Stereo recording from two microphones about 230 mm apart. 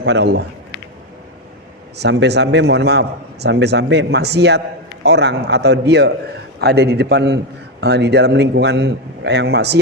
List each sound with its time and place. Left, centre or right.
0.0 s a man's voice: right
2.0 s a man's voice: right